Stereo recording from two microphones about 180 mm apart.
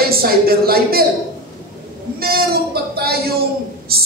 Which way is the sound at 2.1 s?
55° right (ahead or behind).